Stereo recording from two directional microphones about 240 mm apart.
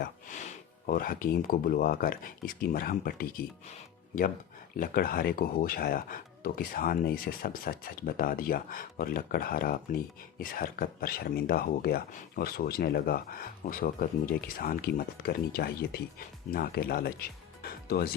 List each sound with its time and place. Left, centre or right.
0.0 s speech: left
4.8 s speech: left